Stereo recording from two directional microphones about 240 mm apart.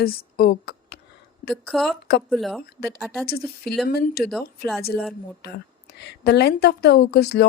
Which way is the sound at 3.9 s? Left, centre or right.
Left.